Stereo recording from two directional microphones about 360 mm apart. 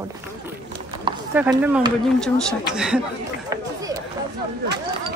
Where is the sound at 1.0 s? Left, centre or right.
Centre.